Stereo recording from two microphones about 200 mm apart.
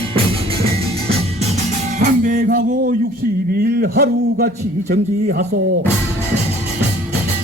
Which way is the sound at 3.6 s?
50° right (ahead or behind).